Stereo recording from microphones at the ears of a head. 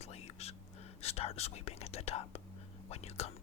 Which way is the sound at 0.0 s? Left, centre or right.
Left.